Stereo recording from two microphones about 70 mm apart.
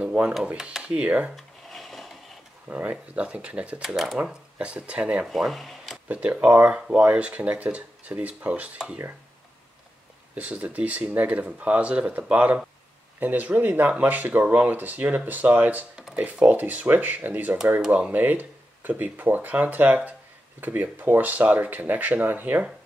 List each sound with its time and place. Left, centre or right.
0.0 s a sound: right
0.6 s speech: centre
1.3 s a sound: centre
2.7 s speech: right
3.8 s speech: centre
4.2 s speech: centre
5.2 s speech: centre
6.0 s speech: centre
10.3 s speech: right
16.0 s a sound: centre
16.3 s speech: right
17.8 s speech: centre
18.1 s speech: right